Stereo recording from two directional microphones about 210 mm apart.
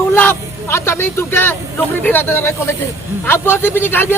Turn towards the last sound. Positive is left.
turn(degrees=10)  # may be behind; listen again after turning